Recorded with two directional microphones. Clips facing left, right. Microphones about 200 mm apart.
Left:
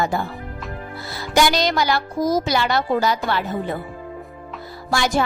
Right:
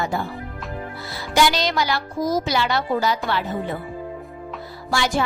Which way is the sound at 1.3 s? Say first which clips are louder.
Left 2 dB; 45° left (ahead or behind).